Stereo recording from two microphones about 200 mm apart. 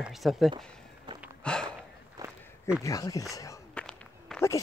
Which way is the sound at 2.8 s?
15° left (ahead or behind).